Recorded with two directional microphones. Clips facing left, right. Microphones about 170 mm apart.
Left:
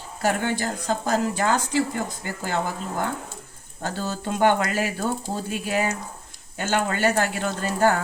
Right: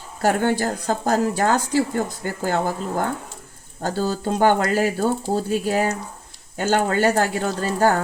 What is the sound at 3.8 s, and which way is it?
Speech, 35° right (ahead or behind).